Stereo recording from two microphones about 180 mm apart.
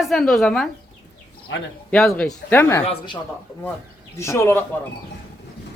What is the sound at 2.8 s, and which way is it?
Speech, 25° left (ahead or behind).